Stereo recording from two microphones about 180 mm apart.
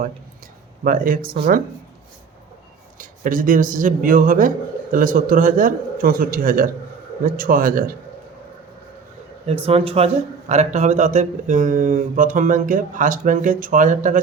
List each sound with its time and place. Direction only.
0.9 s a man's voice: 50° right (ahead or behind)
3.0 s a man's voice: 50° right (ahead or behind)
9.5 s a man's voice: 30° right (ahead or behind)